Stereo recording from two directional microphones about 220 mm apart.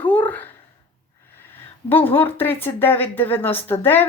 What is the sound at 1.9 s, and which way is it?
Speech, 10° left (ahead or behind).